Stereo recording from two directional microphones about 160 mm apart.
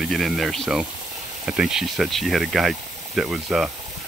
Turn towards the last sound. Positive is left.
turn(degrees=-5)  # may be behind; listen again after turning